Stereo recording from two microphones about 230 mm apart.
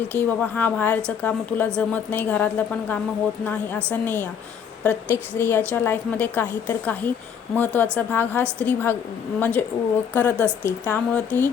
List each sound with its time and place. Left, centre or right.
0.1 s a woman's voice: centre
4.0 s a woman's voice: centre